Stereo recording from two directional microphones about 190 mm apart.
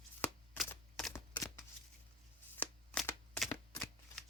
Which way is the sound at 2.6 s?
5° left (ahead or behind).